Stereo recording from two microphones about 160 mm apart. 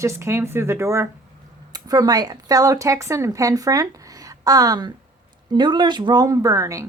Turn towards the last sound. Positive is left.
turn(degrees=-20)  # may be behind; listen again after turning